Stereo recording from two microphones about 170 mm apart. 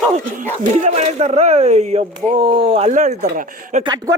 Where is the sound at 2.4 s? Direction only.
30° right (ahead or behind).